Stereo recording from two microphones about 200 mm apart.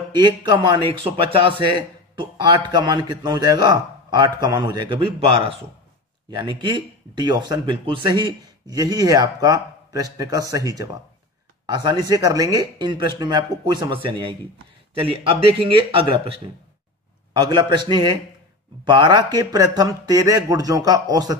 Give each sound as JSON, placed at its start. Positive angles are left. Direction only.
{"t": 0.1, "sound": "speech", "side_deg": -20}